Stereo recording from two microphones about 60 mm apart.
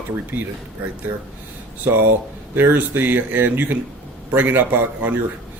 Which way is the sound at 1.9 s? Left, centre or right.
Right.